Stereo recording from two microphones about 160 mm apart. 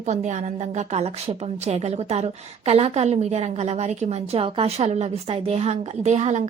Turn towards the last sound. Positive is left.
turn(degrees=-45)  # may be behind; listen again after turning